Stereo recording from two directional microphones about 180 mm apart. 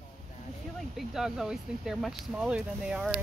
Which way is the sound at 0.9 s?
Centre (ahead or behind).